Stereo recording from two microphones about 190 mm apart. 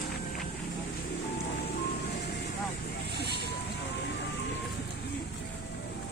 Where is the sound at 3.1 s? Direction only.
60° left (ahead or behind).